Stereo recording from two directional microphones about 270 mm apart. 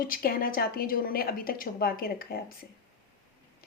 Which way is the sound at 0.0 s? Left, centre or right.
Left.